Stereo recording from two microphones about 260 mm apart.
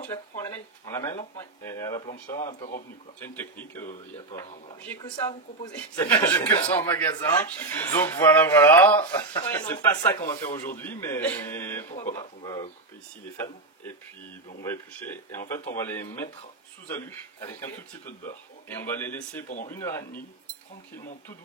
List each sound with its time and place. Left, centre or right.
0.8 s speech: centre
14.6 s speech: centre